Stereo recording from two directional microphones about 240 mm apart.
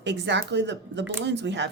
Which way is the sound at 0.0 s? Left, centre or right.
Right.